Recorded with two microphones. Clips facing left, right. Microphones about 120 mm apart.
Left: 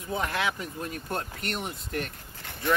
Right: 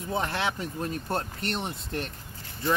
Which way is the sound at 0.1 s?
30° right (ahead or behind).